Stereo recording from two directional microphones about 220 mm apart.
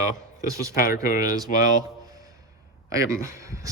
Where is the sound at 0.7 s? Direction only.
40° left (ahead or behind).